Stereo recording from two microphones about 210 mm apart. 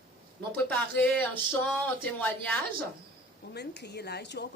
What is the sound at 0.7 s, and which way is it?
Speech, 10° left (ahead or behind).